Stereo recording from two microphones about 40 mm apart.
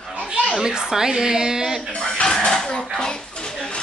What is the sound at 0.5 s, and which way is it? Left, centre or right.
Speech, centre.